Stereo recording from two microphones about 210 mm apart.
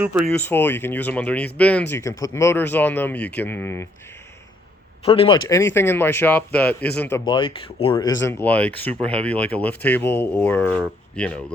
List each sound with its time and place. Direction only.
0.3 s speech: 10° left (ahead or behind)
5.0 s speech: 25° left (ahead or behind)
5.5 s speech: 10° left (ahead or behind)
7.3 s speech: 25° left (ahead or behind)
8.2 s speech: 10° left (ahead or behind)